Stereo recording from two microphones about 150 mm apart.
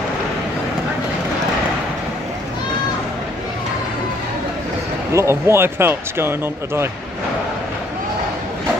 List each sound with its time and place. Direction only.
5.1 s speech: 20° right (ahead or behind)